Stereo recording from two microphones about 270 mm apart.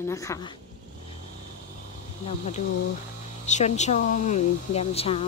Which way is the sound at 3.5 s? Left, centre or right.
Left.